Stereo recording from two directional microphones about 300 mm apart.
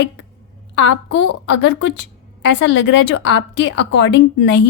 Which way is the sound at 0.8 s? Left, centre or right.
Left.